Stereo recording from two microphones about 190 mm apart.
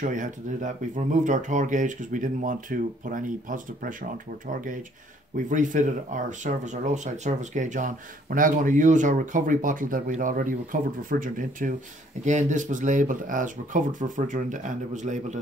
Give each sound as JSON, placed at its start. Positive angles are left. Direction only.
{"t": 0.0, "sound": "speech", "side_deg": -45}
{"t": 5.5, "sound": "speech", "side_deg": -40}